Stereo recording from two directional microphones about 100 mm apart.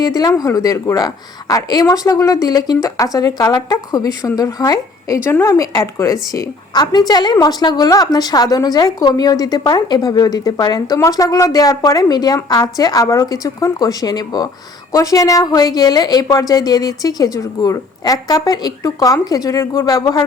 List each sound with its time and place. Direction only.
0.0 s a woman's voice: 40° left (ahead or behind)